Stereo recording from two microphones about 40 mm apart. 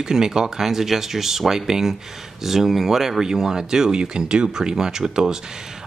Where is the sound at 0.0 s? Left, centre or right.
Centre.